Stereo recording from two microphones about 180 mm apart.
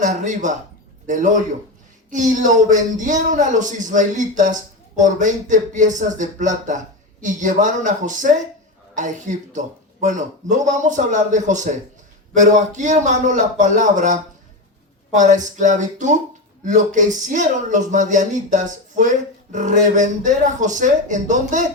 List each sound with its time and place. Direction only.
0.0 s speech: 45° right (ahead or behind)